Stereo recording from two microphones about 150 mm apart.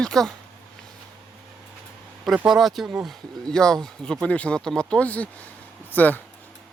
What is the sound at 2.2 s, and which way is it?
Speech, 5° right (ahead or behind).